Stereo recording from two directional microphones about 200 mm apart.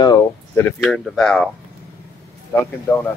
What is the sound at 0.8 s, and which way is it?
Speech, centre (ahead or behind).